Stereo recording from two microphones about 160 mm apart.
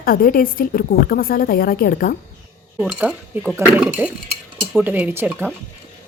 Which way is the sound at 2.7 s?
5° right (ahead or behind).